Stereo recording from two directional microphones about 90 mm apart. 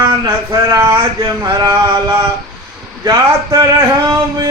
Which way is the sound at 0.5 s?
35° right (ahead or behind).